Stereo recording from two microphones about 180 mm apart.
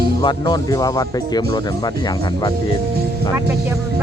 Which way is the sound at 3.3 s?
15° right (ahead or behind).